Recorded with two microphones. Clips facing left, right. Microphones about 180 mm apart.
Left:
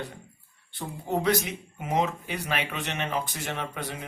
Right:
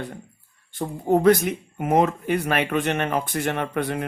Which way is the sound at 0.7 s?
50° right (ahead or behind).